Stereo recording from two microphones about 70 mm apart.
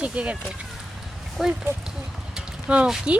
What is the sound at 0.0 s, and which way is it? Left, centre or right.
Speech, centre.